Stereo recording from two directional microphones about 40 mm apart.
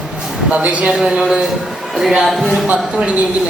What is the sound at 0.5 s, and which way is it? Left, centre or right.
Speech, right.